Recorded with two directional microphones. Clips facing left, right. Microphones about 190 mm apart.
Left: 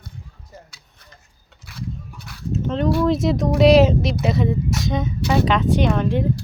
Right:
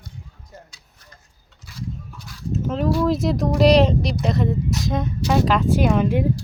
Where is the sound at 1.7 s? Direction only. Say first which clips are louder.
Left 1 dB; 60° left (ahead or behind).